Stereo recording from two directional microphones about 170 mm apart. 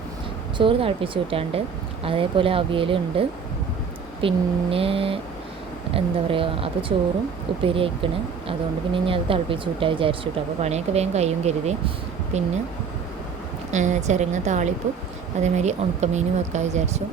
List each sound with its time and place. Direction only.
0.6 s speech: 30° right (ahead or behind)
13.7 s speech: 45° right (ahead or behind)